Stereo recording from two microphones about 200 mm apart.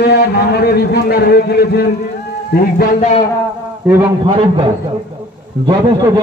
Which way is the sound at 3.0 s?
30° left (ahead or behind).